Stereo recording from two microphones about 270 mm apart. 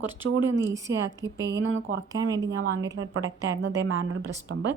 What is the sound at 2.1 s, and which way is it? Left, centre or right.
Speech, centre.